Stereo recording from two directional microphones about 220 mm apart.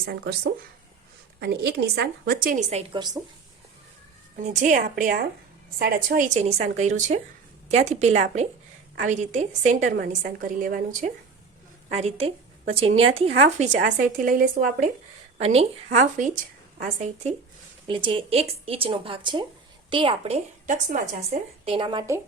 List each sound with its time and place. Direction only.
0.0 s speech: 45° right (ahead or behind)
1.4 s a woman's voice: 50° right (ahead or behind); by 3.2 s 20° right (ahead or behind)
4.4 s a woman's voice: 35° right (ahead or behind)
11.9 s a woman's voice: 30° right (ahead or behind)